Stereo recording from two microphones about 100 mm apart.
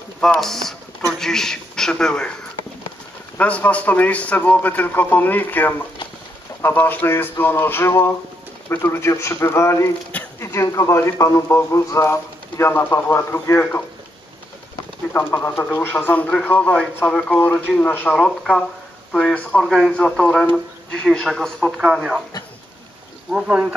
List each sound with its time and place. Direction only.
0.2 s a man's voice: 5° left (ahead or behind)
3.3 s a man's voice: 15° left (ahead or behind)
15.1 s a man's voice: 20° left (ahead or behind); by 22.2 s 5° right (ahead or behind)
23.3 s speech: 10° right (ahead or behind)